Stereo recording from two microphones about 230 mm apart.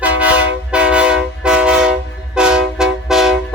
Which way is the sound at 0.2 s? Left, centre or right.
Centre.